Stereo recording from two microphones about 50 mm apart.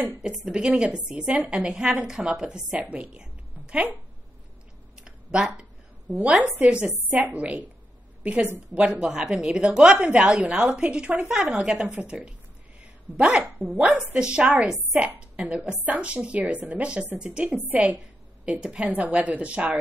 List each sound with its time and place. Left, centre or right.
0.2 s a woman's voice: centre
2.8 s a woman's voice: right
5.0 s a sound: right
6.2 s a woman's voice: centre
13.4 s a woman's voice: right
16.9 s a woman's voice: centre
17.6 s a woman's voice: right
18.9 s a woman's voice: right